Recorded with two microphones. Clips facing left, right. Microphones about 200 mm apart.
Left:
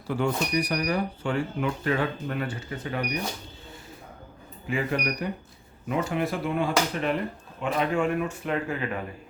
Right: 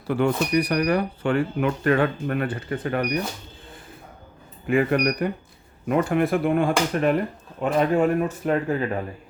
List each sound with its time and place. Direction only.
0.1 s speech: 60° right (ahead or behind)
4.6 s speech: 55° right (ahead or behind)
7.6 s speech: 40° right (ahead or behind)